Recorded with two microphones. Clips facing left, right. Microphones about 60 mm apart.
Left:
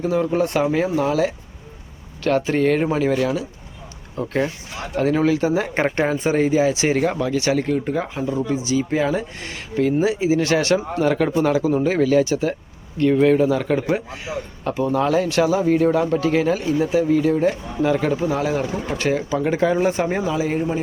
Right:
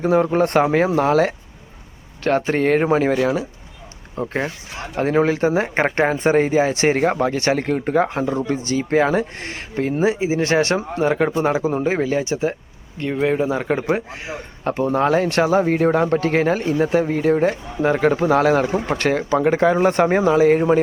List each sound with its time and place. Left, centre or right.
0.0 s speech: right
2.2 s speech: right
4.1 s speech: right